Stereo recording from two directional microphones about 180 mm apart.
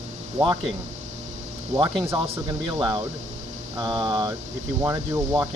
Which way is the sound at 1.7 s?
40° right (ahead or behind).